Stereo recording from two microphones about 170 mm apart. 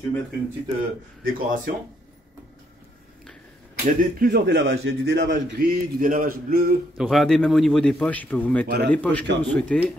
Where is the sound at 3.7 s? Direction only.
65° right (ahead or behind).